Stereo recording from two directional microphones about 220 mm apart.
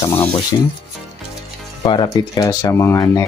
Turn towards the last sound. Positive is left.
turn(degrees=15)  # may be behind; listen again after turning